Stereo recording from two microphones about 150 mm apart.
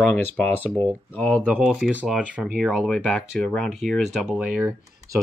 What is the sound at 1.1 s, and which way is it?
Speech, 10° left (ahead or behind).